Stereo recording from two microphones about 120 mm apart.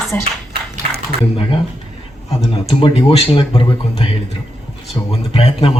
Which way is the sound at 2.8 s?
50° left (ahead or behind).